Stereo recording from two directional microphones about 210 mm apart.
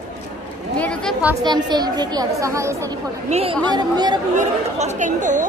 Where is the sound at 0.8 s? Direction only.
5° left (ahead or behind).